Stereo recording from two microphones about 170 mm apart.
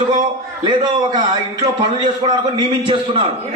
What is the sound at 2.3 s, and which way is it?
Speech, 30° right (ahead or behind).